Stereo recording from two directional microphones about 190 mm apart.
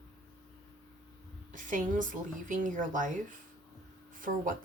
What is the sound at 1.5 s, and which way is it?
Speech, 45° right (ahead or behind).